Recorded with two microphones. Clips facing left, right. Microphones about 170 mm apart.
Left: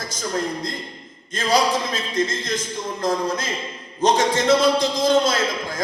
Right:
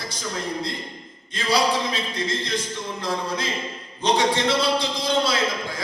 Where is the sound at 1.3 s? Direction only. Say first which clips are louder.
Left 2 dB; 45° left (ahead or behind).